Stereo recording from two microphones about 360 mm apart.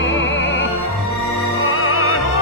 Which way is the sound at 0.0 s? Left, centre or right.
Left.